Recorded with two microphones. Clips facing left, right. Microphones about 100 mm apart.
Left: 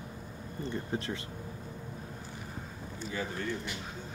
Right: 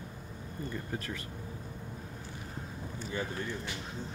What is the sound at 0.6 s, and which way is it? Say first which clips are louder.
Speech: left 3 dB; 25° left (ahead or behind).